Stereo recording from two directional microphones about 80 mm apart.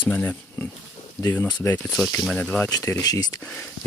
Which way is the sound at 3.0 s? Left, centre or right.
Left.